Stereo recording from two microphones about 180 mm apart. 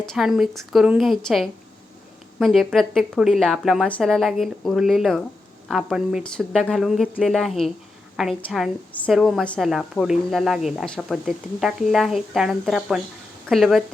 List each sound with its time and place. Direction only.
0.0 s a woman's voice: centre (ahead or behind)